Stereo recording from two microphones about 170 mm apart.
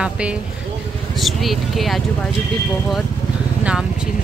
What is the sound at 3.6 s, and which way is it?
Vehicle, 5° right (ahead or behind).